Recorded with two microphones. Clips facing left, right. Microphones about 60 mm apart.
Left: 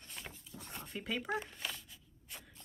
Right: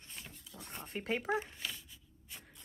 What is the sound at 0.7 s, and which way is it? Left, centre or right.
Speech, right.